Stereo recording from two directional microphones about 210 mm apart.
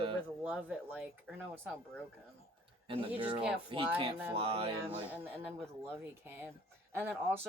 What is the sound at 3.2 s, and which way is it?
Music, 25° right (ahead or behind).